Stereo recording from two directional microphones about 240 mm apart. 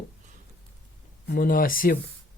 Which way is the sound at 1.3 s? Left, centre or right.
Left.